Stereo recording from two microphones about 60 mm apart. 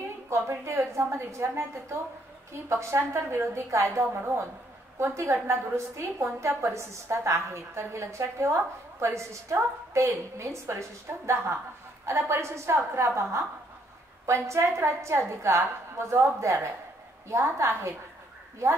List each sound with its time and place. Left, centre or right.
0.3 s a woman's voice: right
4.9 s a woman's voice: right